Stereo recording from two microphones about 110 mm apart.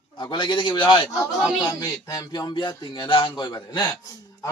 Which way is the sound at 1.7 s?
35° left (ahead or behind).